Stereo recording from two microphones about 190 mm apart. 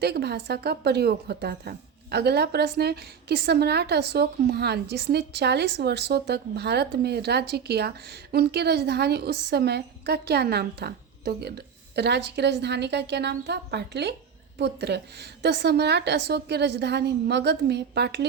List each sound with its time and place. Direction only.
0.0 s a woman's voice: 60° right (ahead or behind)